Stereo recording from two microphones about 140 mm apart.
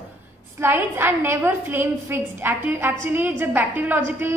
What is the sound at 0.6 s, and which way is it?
A woman's voice, 15° right (ahead or behind).